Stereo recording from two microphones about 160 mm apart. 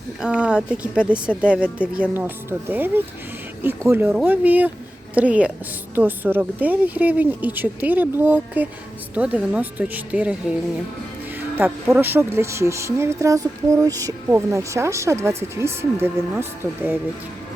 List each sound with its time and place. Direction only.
0.2 s speech: 5° right (ahead or behind)
11.3 s music: 10° right (ahead or behind)
11.9 s speech: 15° right (ahead or behind)